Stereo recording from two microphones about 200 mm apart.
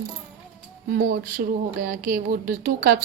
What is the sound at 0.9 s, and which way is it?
Speech, 45° right (ahead or behind).